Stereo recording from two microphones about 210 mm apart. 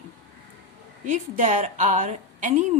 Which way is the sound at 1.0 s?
35° right (ahead or behind).